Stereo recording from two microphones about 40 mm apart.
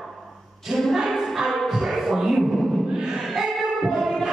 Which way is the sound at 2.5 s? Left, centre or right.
Centre.